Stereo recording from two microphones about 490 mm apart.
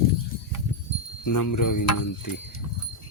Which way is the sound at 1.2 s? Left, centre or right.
Left.